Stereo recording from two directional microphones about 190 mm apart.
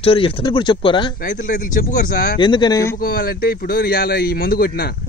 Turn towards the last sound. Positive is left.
turn(degrees=55)  # may be behind; listen again after turning